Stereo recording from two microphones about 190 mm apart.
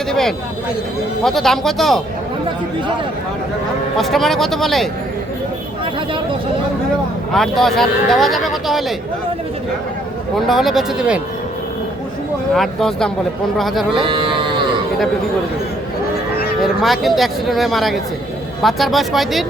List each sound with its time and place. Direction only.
0.1 s speech: centre (ahead or behind)
3.9 s speech: centre (ahead or behind)
7.3 s speech: centre (ahead or behind)
10.3 s speech: centre (ahead or behind)
12.5 s speech: centre (ahead or behind)
14.1 s livestock: 25° right (ahead or behind)
16.6 s speech: centre (ahead or behind)